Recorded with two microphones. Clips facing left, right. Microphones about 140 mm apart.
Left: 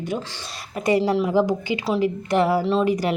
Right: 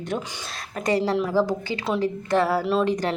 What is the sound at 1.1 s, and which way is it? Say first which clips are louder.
Speech: left 2 dB; 15° left (ahead or behind).